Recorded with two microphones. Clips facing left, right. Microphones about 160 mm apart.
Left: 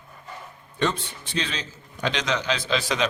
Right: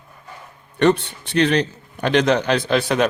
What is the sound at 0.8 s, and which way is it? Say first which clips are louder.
A man's voice: right 9 dB; 65° right (ahead or behind).